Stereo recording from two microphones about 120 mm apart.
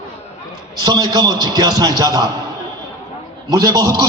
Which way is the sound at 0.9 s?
35° right (ahead or behind).